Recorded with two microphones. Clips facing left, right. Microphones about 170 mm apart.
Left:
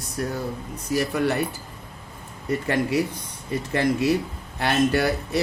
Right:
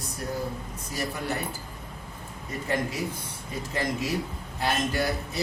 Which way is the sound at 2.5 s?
70° left (ahead or behind).